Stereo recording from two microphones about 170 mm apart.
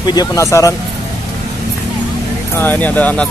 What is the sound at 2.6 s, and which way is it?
Speech, 10° left (ahead or behind).